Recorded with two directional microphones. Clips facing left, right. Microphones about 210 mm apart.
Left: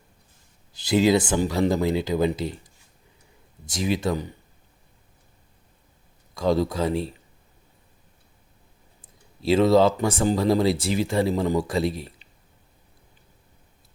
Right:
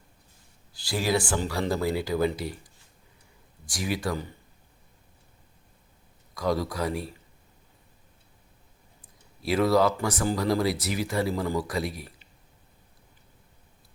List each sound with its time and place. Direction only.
0.7 s speech: 20° left (ahead or behind)
3.7 s speech: 25° left (ahead or behind)
6.3 s speech: 25° left (ahead or behind)
9.4 s speech: 25° left (ahead or behind)